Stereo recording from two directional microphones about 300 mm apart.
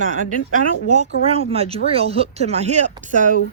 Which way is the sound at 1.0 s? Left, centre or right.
Centre.